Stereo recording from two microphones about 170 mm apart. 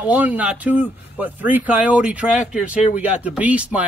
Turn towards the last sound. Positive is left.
turn(degrees=-10)  # may be behind; listen again after turning